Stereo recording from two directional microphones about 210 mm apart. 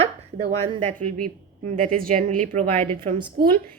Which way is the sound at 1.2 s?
40° right (ahead or behind).